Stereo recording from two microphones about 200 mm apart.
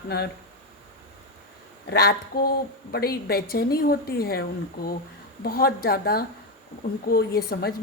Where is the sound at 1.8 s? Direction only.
50° left (ahead or behind).